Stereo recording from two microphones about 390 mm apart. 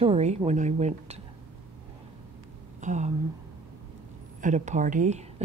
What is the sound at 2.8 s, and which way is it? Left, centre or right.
Speech, centre.